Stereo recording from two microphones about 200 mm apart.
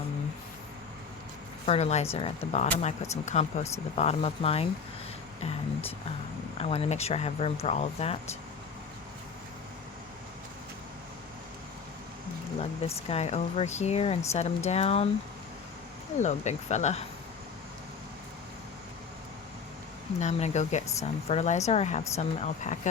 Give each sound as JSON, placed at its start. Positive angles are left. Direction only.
{"t": 1.6, "sound": "speech", "side_deg": 30}
{"t": 6.6, "sound": "speech", "side_deg": 30}
{"t": 13.1, "sound": "speech", "side_deg": 30}
{"t": 16.1, "sound": "speech", "side_deg": 35}
{"t": 20.1, "sound": "speech", "side_deg": 35}